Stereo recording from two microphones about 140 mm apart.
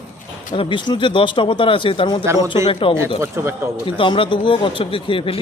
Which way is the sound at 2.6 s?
40° left (ahead or behind).